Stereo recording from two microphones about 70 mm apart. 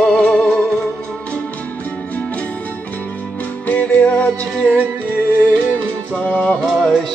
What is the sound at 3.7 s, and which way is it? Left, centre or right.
Music, left.